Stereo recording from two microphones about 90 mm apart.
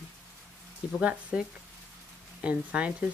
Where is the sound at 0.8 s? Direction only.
15° right (ahead or behind).